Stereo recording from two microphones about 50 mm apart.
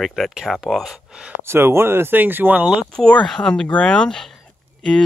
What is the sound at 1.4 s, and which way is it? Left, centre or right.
Speech, right.